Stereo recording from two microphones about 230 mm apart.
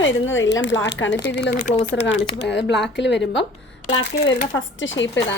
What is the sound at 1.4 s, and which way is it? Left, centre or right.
Speech, left.